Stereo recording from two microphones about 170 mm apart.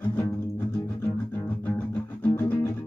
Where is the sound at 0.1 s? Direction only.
10° left (ahead or behind).